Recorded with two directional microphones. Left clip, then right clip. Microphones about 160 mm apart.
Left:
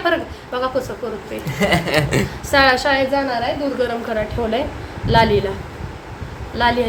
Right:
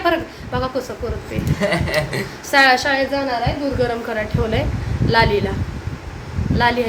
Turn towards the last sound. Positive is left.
turn(degrees=-5)  # may be behind; listen again after turning